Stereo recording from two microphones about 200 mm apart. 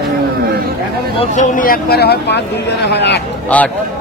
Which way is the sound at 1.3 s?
40° left (ahead or behind).